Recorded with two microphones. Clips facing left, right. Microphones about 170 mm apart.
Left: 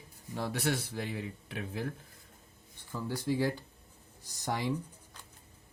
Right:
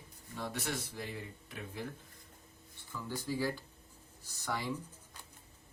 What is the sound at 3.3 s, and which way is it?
Speech, 20° left (ahead or behind).